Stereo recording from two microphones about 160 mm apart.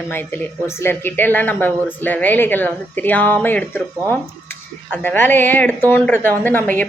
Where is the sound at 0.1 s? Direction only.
15° left (ahead or behind).